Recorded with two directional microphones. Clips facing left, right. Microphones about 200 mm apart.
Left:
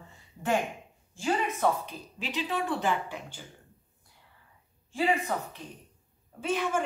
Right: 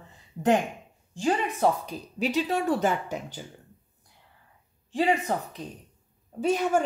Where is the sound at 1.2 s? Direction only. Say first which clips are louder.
Right 3 dB; 35° right (ahead or behind).